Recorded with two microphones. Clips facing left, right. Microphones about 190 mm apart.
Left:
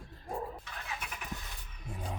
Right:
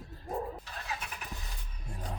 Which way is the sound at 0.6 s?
35° right (ahead or behind).